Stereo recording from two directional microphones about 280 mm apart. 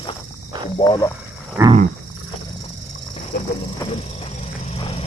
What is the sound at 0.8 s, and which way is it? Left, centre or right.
Speech, centre.